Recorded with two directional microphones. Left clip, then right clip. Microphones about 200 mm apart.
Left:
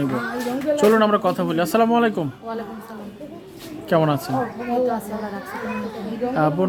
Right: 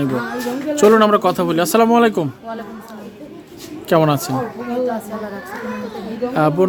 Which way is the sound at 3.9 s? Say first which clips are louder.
Right 4 dB; 35° right (ahead or behind).